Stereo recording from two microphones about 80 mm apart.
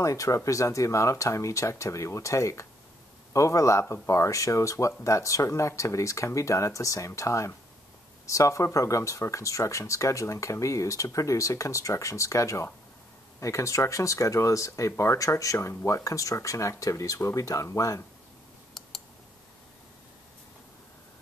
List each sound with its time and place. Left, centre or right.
0.0 s speech: left
18.8 s clicking: centre